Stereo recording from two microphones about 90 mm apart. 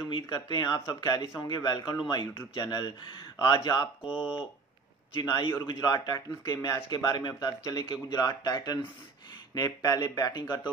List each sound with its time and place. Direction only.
0.1 s speech: 60° left (ahead or behind)
4.0 s speech: 10° right (ahead or behind)
5.2 s speech: 45° left (ahead or behind)